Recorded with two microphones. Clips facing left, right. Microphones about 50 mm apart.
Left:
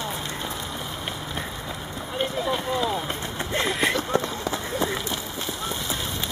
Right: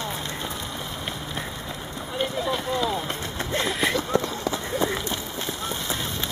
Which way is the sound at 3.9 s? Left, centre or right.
Left.